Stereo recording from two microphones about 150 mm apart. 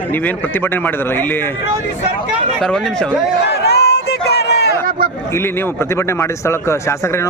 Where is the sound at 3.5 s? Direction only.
90° left.